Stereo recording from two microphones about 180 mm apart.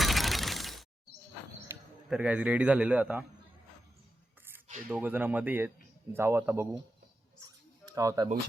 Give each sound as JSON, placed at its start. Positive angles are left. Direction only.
{"t": 0.0, "sound": "mechanisms", "side_deg": 0}
{"t": 1.7, "sound": "bird", "side_deg": -15}
{"t": 2.0, "sound": "a man's voice", "side_deg": -5}
{"t": 4.9, "sound": "a man's voice", "side_deg": -10}
{"t": 7.4, "sound": "a sound", "side_deg": -20}